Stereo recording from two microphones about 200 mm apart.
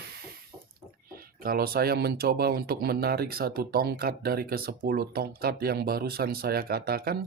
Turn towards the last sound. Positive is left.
turn(degrees=-50)  # may be behind; listen again after turning